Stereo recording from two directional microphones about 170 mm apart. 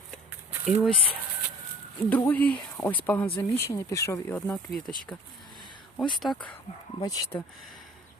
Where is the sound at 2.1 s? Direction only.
10° left (ahead or behind).